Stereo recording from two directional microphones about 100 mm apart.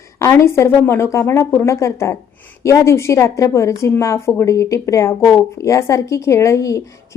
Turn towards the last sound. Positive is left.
turn(degrees=30)  # may be behind; listen again after turning